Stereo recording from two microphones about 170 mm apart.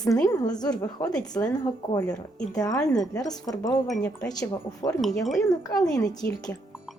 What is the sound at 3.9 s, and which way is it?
Speech, 5° left (ahead or behind).